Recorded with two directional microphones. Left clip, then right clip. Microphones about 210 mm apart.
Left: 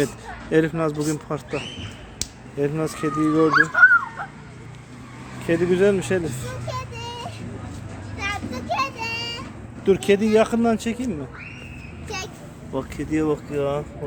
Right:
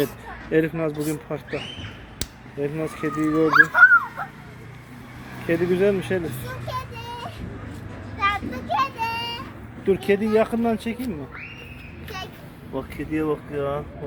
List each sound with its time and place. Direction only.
0.5 s speech: 10° left (ahead or behind)
2.6 s speech: 15° left (ahead or behind)
3.5 s speech: 40° right (ahead or behind)
5.5 s speech: 5° left (ahead or behind)
6.7 s vehicle: 5° left (ahead or behind)
8.2 s child singing: 10° left (ahead or behind)
9.8 s speech: 10° left (ahead or behind)
12.0 s a sound: 50° left (ahead or behind)
12.7 s speech: 10° left (ahead or behind)